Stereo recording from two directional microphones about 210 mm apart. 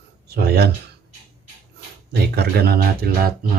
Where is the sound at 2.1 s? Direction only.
50° right (ahead or behind).